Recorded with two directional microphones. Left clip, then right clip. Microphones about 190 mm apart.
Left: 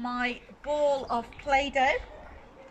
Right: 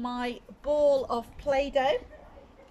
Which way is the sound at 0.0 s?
30° right (ahead or behind).